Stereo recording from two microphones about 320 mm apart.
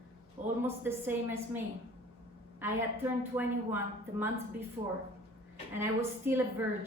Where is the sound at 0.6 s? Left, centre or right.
Centre.